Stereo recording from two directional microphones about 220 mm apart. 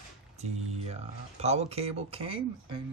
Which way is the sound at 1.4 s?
30° right (ahead or behind).